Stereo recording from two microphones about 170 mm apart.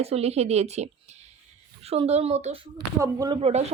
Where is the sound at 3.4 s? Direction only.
40° right (ahead or behind).